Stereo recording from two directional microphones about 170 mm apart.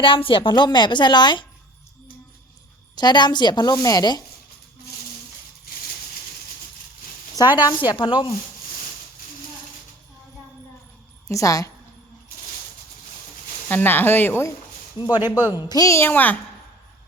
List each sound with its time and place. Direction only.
0.0 s a woman's voice: 30° left (ahead or behind)
2.9 s a woman's voice: 25° left (ahead or behind)
7.3 s a woman's voice: 25° left (ahead or behind)
11.3 s a woman's voice: 20° left (ahead or behind)
13.7 s speech: 10° left (ahead or behind)
14.9 s speech: 25° left (ahead or behind)
15.2 s a woman's voice: 15° right (ahead or behind)
15.5 s speech: 20° left (ahead or behind)